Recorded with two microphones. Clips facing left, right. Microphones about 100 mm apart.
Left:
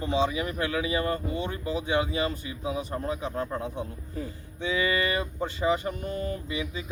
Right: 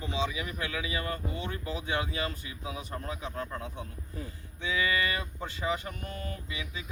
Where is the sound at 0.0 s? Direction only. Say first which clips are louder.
Left 7 dB; 40° left (ahead or behind).